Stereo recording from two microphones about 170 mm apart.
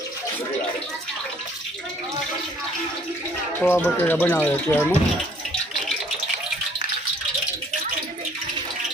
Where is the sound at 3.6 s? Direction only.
10° left (ahead or behind).